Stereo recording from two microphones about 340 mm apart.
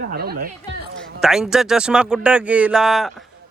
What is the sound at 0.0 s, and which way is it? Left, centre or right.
Chatter, right.